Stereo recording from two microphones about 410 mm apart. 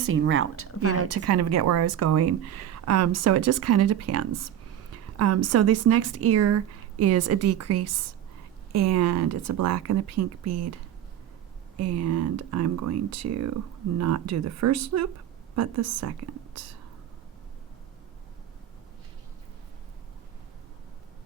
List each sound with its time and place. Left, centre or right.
0.1 s speech: right
11.8 s speech: right